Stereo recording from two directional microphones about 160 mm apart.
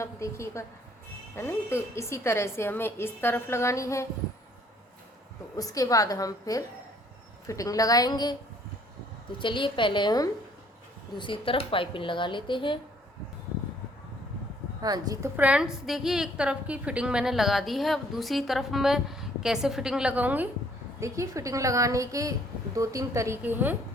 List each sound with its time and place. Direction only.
0.0 s a woman's voice: 20° left (ahead or behind)
5.5 s a woman's voice: 20° left (ahead or behind)
9.4 s speech: 30° left (ahead or behind)
14.8 s a woman's voice: 25° right (ahead or behind)
15.4 s a woman's voice: 5° right (ahead or behind)